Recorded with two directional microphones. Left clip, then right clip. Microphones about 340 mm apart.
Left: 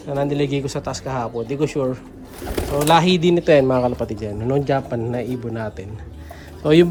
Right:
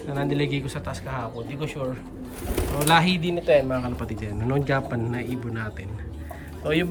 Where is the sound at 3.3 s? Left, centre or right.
Left.